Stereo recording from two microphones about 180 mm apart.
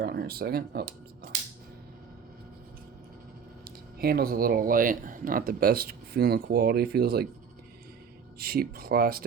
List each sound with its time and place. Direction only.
0.0 s speech: 60° right (ahead or behind)
3.6 s speech: 60° right (ahead or behind)
8.4 s speech: 55° right (ahead or behind)